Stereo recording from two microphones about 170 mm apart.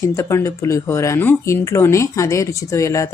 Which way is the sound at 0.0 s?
15° left (ahead or behind).